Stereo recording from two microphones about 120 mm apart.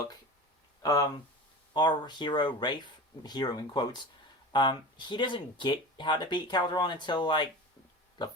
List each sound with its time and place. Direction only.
0.8 s speech: 30° left (ahead or behind)